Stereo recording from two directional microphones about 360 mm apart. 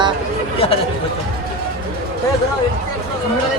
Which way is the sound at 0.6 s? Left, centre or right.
Centre.